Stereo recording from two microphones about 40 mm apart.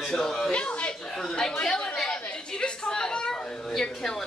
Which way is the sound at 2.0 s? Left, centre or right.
Left.